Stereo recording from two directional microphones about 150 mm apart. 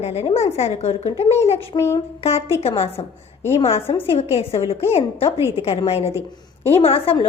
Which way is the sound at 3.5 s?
35° left (ahead or behind).